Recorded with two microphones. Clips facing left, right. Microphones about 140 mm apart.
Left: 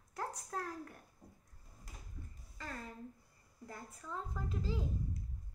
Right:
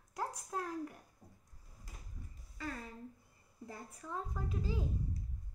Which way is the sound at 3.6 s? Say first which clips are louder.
Right 1 dB; 15° right (ahead or behind).